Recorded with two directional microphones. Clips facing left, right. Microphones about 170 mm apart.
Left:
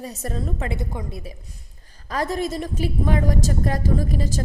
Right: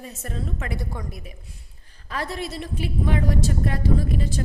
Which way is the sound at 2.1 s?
40° left (ahead or behind).